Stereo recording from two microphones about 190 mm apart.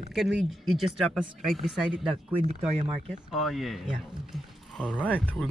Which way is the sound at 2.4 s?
40° right (ahead or behind).